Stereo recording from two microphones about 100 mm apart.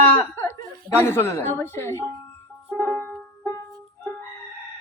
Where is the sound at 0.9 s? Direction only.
25° left (ahead or behind).